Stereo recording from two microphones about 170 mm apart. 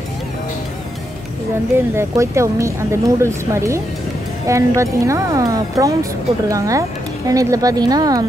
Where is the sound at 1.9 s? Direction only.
15° right (ahead or behind).